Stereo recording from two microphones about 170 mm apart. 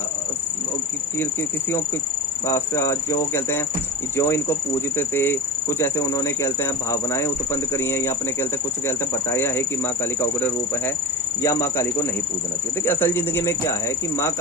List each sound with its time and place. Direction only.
2.5 s speech: 15° left (ahead or behind)